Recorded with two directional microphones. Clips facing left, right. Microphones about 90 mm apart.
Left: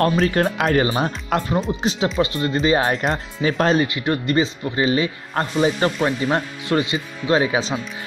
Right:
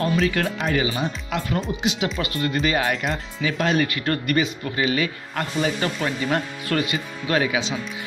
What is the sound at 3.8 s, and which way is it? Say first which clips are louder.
Speech: left 2 dB; 20° left (ahead or behind).